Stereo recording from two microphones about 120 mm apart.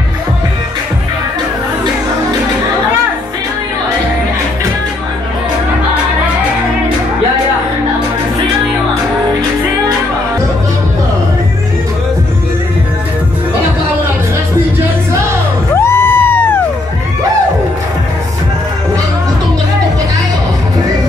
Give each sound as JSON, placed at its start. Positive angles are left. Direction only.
{"t": 15.7, "sound": "music", "side_deg": 20}